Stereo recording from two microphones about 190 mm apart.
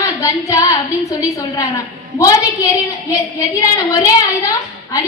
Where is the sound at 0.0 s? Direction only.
15° left (ahead or behind).